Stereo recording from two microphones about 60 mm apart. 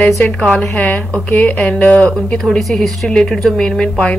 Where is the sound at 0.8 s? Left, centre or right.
Left.